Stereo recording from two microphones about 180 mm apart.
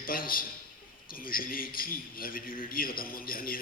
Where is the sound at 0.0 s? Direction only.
55° left (ahead or behind).